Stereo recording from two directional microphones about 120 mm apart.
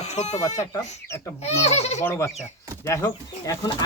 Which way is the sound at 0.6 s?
25° left (ahead or behind).